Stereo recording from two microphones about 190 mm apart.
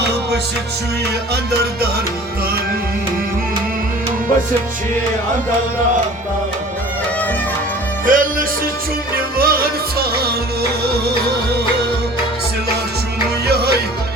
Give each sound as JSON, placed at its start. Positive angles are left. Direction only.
{"t": 8.0, "sound": "music", "side_deg": -45}